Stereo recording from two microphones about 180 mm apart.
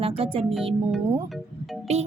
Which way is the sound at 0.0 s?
30° right (ahead or behind).